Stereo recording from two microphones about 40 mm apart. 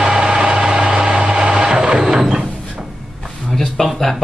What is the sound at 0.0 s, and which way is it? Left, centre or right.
Vehicle, centre.